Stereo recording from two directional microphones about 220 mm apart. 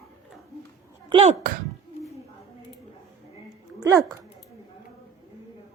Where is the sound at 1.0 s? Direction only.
25° right (ahead or behind).